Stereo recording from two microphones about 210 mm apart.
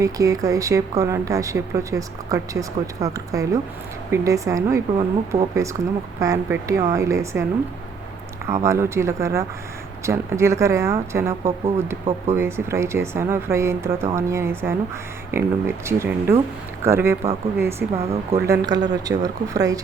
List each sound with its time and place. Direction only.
0.0 s speech: 15° right (ahead or behind)
8.4 s speech: 15° right (ahead or behind)
17.9 s speech: 30° right (ahead or behind)
18.3 s speech: 15° right (ahead or behind)